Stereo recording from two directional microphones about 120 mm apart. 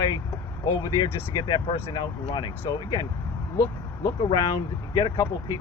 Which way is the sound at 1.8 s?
55° left (ahead or behind).